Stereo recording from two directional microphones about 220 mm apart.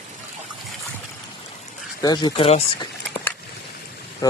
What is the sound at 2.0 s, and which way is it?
Speech, 20° left (ahead or behind).